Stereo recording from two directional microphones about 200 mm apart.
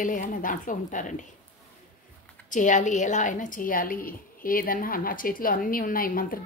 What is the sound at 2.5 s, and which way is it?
A woman's voice, 40° left (ahead or behind).